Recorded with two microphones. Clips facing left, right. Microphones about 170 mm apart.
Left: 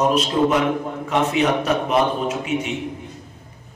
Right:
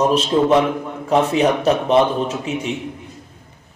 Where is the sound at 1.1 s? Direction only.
35° right (ahead or behind).